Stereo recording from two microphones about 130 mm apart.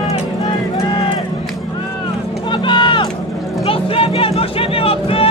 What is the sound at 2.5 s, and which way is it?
Vehicle, 40° left (ahead or behind).